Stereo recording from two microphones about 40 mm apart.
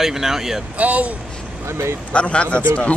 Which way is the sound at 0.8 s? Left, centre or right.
Right.